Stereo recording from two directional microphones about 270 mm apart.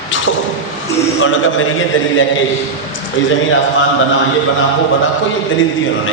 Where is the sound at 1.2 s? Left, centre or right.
Left.